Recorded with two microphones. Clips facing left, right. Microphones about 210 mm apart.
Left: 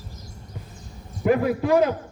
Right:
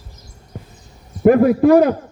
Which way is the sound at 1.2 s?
50° right (ahead or behind).